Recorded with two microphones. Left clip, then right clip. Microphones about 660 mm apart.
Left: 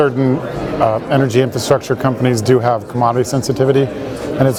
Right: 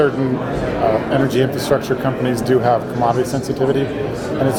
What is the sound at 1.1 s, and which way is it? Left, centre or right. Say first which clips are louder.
Speech: left 2 dB; left.